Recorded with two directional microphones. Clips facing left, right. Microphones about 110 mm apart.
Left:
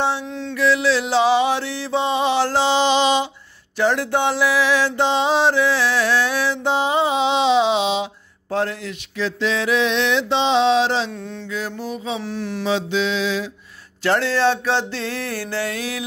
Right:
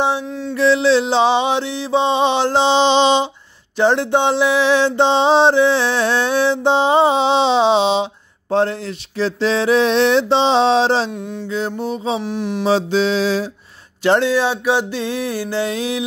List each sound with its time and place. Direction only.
0.3 s music: 5° right (ahead or behind)
0.6 s mantra: 30° right (ahead or behind)
11.1 s mantra: 15° right (ahead or behind)
11.4 s mantra: 25° right (ahead or behind)
12.2 s mantra: 15° right (ahead or behind)
12.6 s music: 35° right (ahead or behind)
14.0 s mantra: 20° right (ahead or behind)